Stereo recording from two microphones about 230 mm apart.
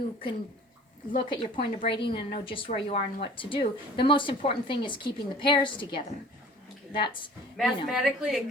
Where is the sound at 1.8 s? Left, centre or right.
Left.